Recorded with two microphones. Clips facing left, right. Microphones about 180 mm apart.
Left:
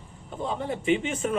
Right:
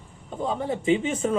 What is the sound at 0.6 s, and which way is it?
Speech, 30° right (ahead or behind).